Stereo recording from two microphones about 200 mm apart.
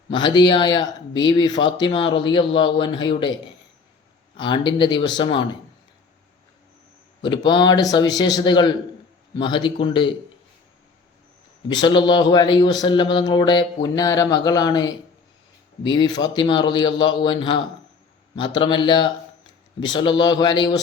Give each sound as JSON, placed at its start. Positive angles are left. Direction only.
{"t": 0.1, "sound": "speech", "side_deg": 25}
{"t": 4.4, "sound": "speech", "side_deg": 25}
{"t": 7.2, "sound": "speech", "side_deg": 25}
{"t": 11.7, "sound": "speech", "side_deg": 20}